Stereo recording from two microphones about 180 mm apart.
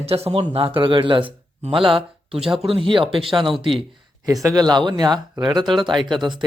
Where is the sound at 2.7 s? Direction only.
30° right (ahead or behind).